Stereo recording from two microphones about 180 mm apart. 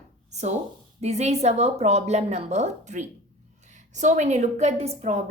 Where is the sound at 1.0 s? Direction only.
40° right (ahead or behind).